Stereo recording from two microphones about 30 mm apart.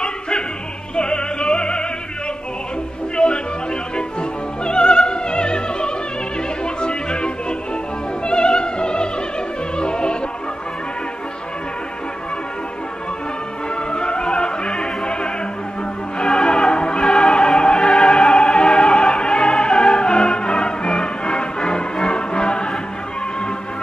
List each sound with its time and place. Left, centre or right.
0.9 s music: left
3.2 s music: left
4.6 s music: left
8.3 s music: left
9.8 s opera: left
13.9 s opera: left
16.2 s music: left